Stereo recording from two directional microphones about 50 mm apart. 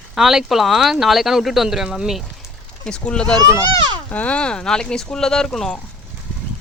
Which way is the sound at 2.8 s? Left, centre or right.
Centre.